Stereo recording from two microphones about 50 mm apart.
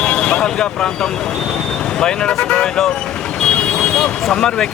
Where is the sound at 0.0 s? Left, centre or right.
Centre.